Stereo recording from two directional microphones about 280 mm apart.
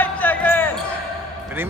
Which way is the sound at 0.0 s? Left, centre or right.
Centre.